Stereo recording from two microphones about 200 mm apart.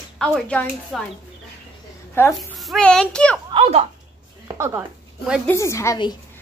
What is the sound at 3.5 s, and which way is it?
Speech, 30° right (ahead or behind).